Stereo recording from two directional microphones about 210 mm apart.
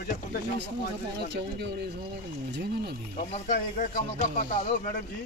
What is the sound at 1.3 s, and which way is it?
Speech, 50° right (ahead or behind).